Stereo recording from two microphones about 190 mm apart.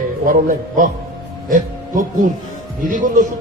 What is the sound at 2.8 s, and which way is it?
Speech, 45° right (ahead or behind).